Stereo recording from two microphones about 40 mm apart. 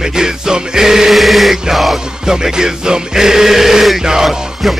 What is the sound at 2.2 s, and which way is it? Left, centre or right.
Music, centre.